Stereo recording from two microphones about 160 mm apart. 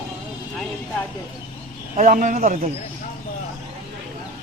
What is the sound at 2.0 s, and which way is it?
Speech, 55° right (ahead or behind).